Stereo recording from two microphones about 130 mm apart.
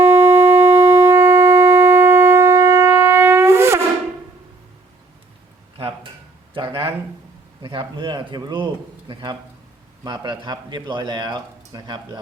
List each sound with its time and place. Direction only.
0.0 s shofar: 20° right (ahead or behind)
6.5 s a sound: 40° right (ahead or behind)
7.6 s speech: 40° right (ahead or behind)